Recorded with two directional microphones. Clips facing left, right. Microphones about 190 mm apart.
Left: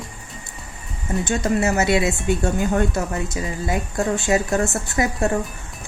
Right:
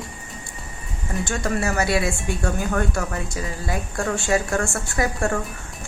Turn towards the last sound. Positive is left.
turn(degrees=20)  # may be behind; listen again after turning